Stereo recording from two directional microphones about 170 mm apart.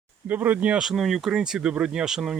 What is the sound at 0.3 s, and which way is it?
Speech, 10° right (ahead or behind).